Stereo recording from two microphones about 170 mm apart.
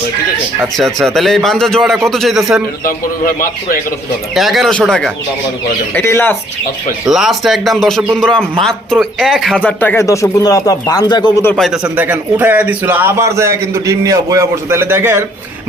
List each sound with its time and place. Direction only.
0.8 s a man's voice: centre (ahead or behind)
4.4 s a man's voice: centre (ahead or behind)
5.9 s speech: 15° left (ahead or behind)
7.0 s a man's voice: centre (ahead or behind); by 11.3 s 25° left (ahead or behind)
11.5 s a man's voice: centre (ahead or behind)